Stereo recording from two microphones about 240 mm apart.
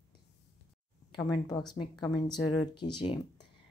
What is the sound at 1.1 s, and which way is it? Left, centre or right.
A woman's voice, centre.